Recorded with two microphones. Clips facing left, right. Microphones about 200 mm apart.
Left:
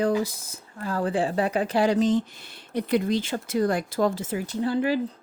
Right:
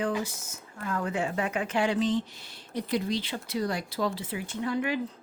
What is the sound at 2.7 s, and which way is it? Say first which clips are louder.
Speech: left 6 dB; 55° left (ahead or behind).